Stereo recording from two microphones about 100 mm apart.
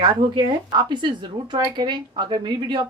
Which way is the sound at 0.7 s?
50° right (ahead or behind).